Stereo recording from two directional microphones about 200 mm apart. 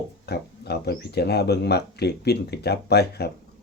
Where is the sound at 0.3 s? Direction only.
55° left (ahead or behind).